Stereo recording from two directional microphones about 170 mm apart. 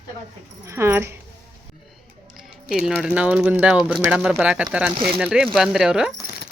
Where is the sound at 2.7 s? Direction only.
Centre (ahead or behind).